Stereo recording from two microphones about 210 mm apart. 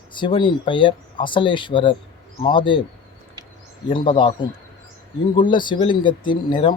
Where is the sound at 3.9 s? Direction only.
25° left (ahead or behind).